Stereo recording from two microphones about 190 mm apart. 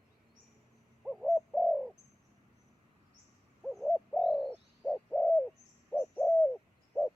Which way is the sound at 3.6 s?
Centre (ahead or behind).